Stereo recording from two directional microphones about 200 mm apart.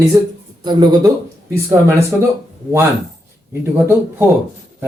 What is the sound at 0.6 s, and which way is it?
Speech, 20° right (ahead or behind).